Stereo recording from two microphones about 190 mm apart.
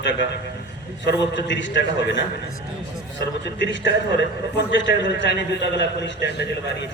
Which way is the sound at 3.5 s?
70° left (ahead or behind).